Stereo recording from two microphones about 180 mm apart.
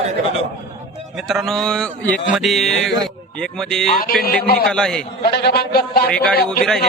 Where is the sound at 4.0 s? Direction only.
55° left (ahead or behind).